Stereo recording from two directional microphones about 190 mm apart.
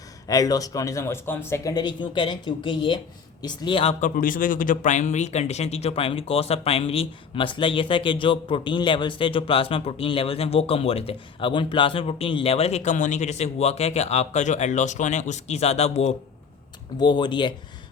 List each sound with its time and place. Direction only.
0.3 s speech: 20° left (ahead or behind)
4.0 s speech: 45° left (ahead or behind)
17.0 s speech: 25° left (ahead or behind)